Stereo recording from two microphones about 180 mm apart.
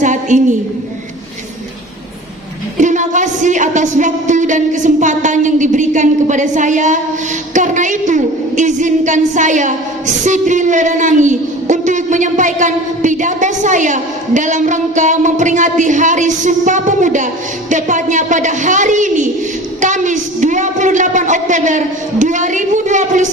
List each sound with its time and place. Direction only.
0.0 s a woman's voice: 45° right (ahead or behind)
2.7 s a woman's voice: 45° right (ahead or behind)